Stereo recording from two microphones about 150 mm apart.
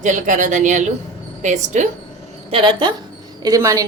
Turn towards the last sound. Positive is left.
turn(degrees=-20)  # may be behind; listen again after turning